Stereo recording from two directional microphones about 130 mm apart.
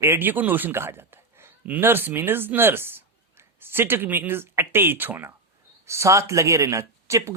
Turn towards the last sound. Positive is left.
turn(degrees=-25)  # may be behind; listen again after turning